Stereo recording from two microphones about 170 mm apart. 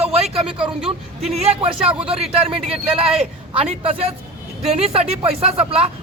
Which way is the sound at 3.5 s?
35° right (ahead or behind).